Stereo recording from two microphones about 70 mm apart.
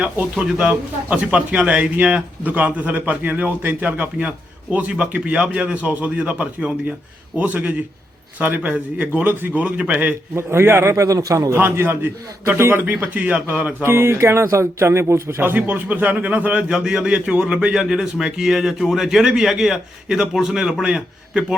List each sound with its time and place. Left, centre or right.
0.3 s a man's voice: centre
10.3 s a man's voice: right
11.5 s speech: right
12.8 s speech: right
13.8 s speech: right
15.4 s a man's voice: right